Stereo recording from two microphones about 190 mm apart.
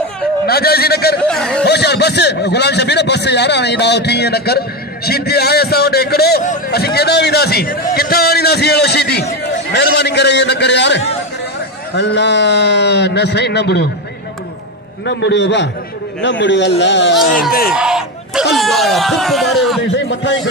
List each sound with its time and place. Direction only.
0.5 s a man's voice: 55° left (ahead or behind)
1.2 s speech: 5° left (ahead or behind)
1.6 s a man's voice: 60° left (ahead or behind)
15.0 s a man's voice: 65° left (ahead or behind)
17.3 s speech: 50° left (ahead or behind)
17.6 s speech: 5° right (ahead or behind)